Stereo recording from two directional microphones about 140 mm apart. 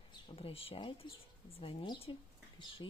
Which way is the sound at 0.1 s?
40° left (ahead or behind).